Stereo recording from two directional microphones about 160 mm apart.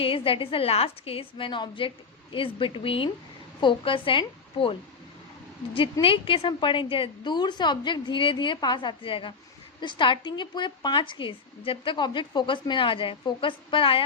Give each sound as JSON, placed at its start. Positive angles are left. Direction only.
{"t": 0.0, "sound": "a woman's voice", "side_deg": 35}